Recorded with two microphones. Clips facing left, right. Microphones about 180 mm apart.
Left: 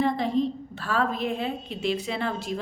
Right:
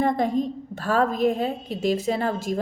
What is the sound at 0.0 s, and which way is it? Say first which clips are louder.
A woman's voice: right 2 dB; 45° right (ahead or behind).